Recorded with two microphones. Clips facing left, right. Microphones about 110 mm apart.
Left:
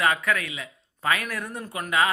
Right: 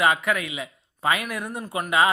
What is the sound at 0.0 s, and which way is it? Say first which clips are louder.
A man's voice: right 2 dB; 20° right (ahead or behind).